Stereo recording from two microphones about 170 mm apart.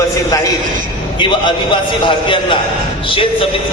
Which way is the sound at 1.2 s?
30° left (ahead or behind).